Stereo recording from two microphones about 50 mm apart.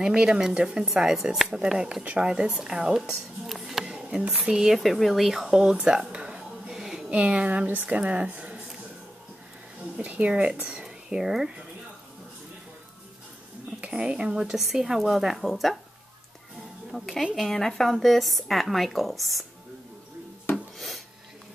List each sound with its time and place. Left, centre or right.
0.0 s speech: centre
3.8 s speech: centre
4.6 s a woman's voice: centre
5.9 s a sound: centre
6.7 s a sound: centre
7.1 s speech: right
10.0 s speech: right; by 11.5 s centre
13.7 s speech: right
14.7 s a woman's voice: centre
16.9 s a woman's voice: centre
20.5 s rub: centre